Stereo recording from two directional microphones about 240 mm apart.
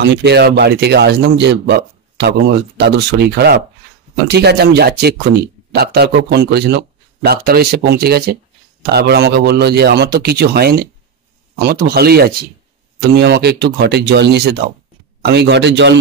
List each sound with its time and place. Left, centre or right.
0.0 s speech: right